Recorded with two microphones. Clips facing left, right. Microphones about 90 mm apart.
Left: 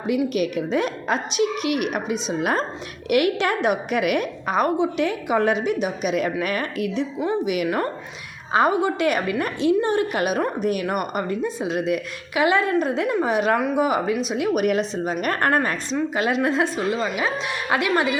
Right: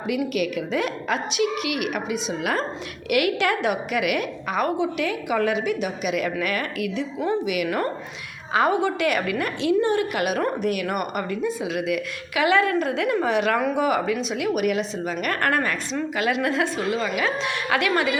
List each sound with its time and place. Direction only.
0.1 s a woman's voice: 30° left (ahead or behind)